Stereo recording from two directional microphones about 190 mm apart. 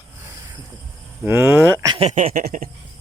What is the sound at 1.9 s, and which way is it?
Speech, 35° right (ahead or behind).